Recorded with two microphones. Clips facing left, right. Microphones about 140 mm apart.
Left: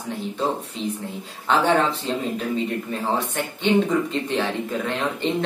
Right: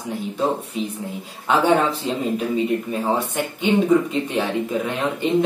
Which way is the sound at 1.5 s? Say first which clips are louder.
Right 2 dB; 10° right (ahead or behind).